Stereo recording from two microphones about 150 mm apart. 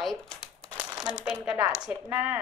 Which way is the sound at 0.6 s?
25° right (ahead or behind).